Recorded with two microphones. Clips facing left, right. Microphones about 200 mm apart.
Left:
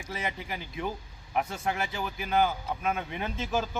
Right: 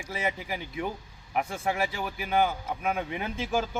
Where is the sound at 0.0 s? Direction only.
10° right (ahead or behind).